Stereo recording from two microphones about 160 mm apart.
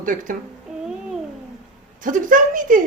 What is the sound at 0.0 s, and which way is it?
Speech, 55° right (ahead or behind).